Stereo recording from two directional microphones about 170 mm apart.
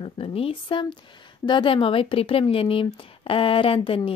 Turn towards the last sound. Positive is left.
turn(degrees=30)  # may be behind; listen again after turning